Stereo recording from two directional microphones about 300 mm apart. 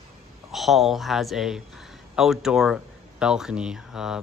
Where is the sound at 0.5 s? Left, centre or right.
Centre.